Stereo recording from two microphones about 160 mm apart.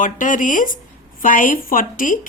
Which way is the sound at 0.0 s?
55° left (ahead or behind).